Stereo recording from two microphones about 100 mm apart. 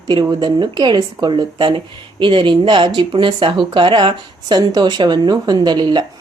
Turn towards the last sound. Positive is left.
turn(degrees=-50)  # may be behind; listen again after turning